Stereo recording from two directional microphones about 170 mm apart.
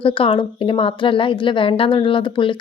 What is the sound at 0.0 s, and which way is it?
A woman's voice, 30° left (ahead or behind).